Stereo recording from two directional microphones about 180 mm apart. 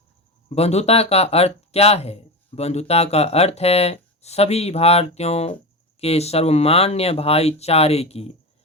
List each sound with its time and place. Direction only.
0.5 s speech: 35° left (ahead or behind)